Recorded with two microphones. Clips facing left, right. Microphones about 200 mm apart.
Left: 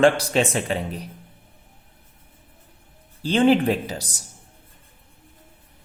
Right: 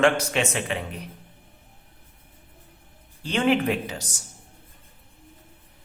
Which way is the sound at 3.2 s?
30° left (ahead or behind).